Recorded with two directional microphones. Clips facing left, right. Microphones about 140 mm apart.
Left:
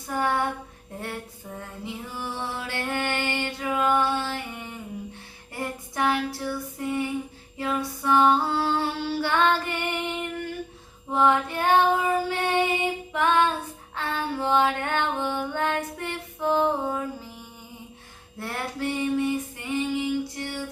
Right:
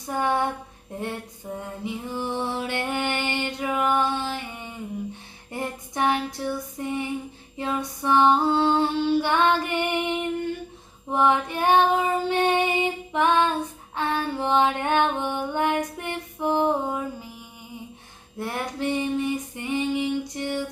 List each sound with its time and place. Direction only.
0.1 s a sound: 20° right (ahead or behind)
1.5 s music: 20° right (ahead or behind)
5.5 s female singing: 20° right (ahead or behind)
18.3 s female singing: 15° right (ahead or behind)